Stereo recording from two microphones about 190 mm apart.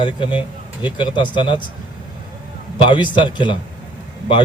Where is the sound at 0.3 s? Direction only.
25° left (ahead or behind).